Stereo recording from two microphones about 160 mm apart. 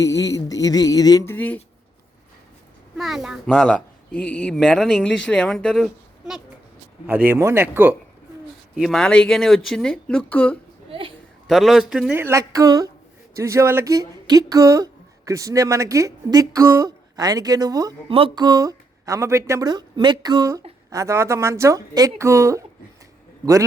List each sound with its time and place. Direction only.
0.0 s speech: 20° left (ahead or behind)
3.0 s speech: centre (ahead or behind)
7.3 s speech: 15° right (ahead or behind)
8.7 s speech: centre (ahead or behind)
12.1 s speech: 15° right (ahead or behind)